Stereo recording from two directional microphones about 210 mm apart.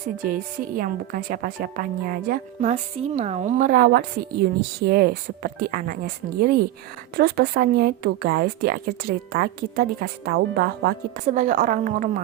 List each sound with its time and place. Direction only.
0.2 s speech: 40° right (ahead or behind)
11.3 s speech: 40° right (ahead or behind)